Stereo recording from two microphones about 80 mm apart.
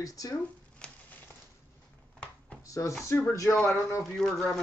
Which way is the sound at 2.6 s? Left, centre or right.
Left.